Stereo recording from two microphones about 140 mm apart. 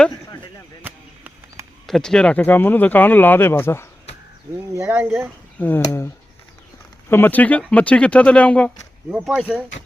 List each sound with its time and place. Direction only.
0.8 s a sound: 15° right (ahead or behind)
1.9 s speech: 5° left (ahead or behind)
4.9 s speech: 10° right (ahead or behind)
5.5 s speech: 15° left (ahead or behind)
7.1 s speech: 15° left (ahead or behind)
9.0 s speech: 5° right (ahead or behind)